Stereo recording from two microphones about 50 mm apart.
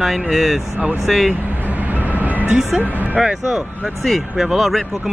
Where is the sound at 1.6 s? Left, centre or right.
Right.